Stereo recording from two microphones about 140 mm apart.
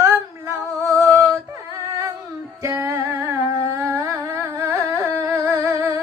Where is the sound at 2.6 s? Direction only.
20° right (ahead or behind).